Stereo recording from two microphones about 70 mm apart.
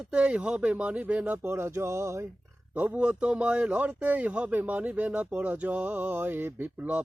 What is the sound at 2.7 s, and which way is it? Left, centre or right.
A man's voice, centre.